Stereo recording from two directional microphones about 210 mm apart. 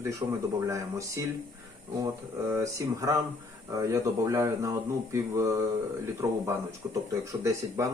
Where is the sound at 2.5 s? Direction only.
15° right (ahead or behind).